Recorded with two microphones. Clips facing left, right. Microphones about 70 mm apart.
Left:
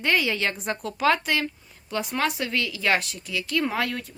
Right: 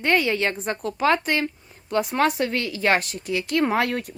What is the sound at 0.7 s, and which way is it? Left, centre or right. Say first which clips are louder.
Speech: even; right.